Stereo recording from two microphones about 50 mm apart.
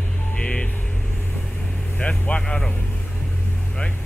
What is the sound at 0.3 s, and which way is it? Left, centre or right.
Vehicle, left.